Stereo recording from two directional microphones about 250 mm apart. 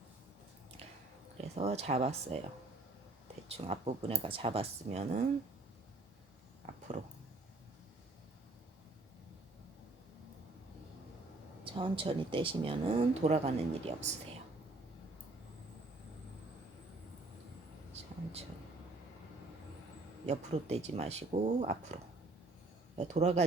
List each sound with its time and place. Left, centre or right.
1.5 s speech: right
3.6 s speech: right
11.6 s speech: right
17.9 s a sound: right
20.2 s speech: right
23.0 s speech: right